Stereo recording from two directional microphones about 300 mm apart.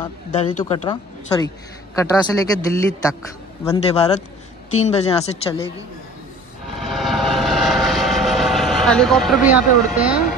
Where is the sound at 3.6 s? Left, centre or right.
Centre.